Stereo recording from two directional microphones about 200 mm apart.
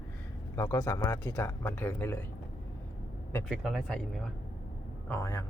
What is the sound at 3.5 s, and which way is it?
Speech, centre (ahead or behind).